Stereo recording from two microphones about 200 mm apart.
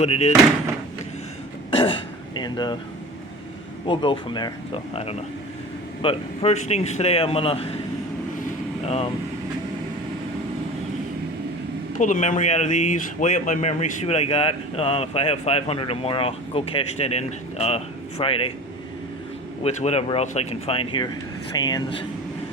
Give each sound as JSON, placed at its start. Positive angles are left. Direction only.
{"t": 0.0, "sound": "speech", "side_deg": 30}
{"t": 1.7, "sound": "speech", "side_deg": 25}
{"t": 3.8, "sound": "speech", "side_deg": 25}
{"t": 11.9, "sound": "speech", "side_deg": 40}
{"t": 19.6, "sound": "speech", "side_deg": 30}